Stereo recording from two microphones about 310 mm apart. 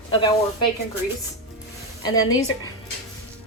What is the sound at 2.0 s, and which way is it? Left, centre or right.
Speech, centre.